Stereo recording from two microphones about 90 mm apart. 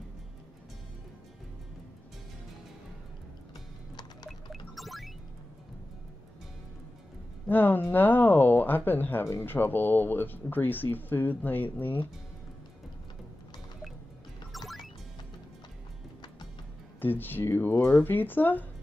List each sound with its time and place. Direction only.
4.3 s music: centre (ahead or behind)
7.4 s speech: 20° left (ahead or behind)
14.5 s music: centre (ahead or behind)
17.0 s speech: 20° left (ahead or behind)